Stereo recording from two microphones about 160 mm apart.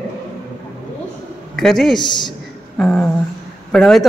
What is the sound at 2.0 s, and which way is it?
Speech, 25° left (ahead or behind).